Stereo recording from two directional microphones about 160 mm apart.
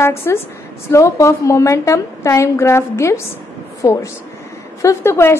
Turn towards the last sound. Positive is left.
turn(degrees=15)  # may be behind; listen again after turning